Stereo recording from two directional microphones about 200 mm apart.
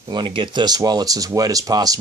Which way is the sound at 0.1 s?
25° right (ahead or behind).